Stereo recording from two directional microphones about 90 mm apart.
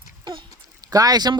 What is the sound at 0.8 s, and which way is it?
Speech, 45° right (ahead or behind).